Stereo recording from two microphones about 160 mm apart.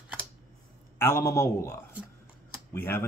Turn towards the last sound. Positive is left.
turn(degrees=15)  # may be behind; listen again after turning